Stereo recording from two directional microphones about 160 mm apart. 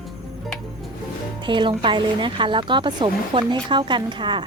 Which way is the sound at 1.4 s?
30° right (ahead or behind).